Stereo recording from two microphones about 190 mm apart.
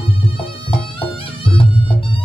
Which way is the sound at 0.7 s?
30° left (ahead or behind).